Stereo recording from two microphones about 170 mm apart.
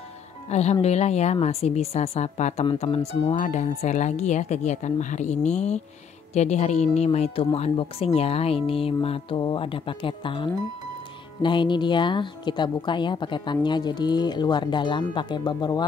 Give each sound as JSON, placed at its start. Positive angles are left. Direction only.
{"t": 0.5, "sound": "speech", "side_deg": 40}